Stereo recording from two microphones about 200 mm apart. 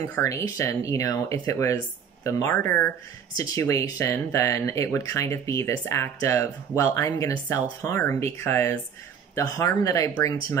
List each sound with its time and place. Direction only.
0.0 s speech: 15° left (ahead or behind)